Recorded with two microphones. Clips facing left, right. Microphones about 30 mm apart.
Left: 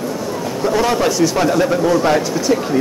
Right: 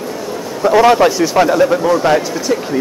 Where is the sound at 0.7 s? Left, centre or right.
Right.